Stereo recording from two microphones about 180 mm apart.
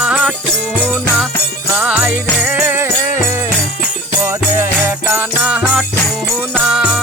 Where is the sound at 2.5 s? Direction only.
10° right (ahead or behind).